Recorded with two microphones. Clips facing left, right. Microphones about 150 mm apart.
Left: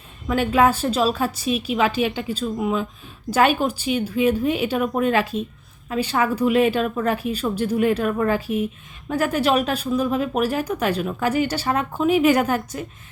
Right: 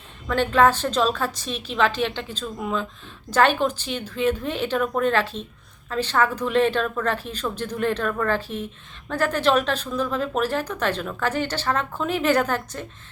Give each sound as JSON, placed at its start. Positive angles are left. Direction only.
{"t": 0.3, "sound": "speech", "side_deg": 10}